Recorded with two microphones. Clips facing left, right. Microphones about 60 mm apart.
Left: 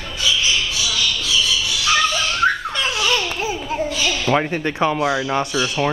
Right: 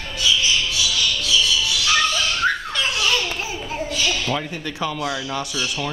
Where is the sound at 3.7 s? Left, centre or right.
Left.